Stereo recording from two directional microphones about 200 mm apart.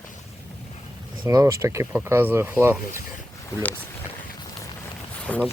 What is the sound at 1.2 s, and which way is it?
Speech, 15° right (ahead or behind).